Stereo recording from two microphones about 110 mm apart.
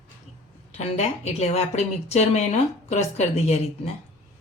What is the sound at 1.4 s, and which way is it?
A woman's voice, 75° left (ahead or behind).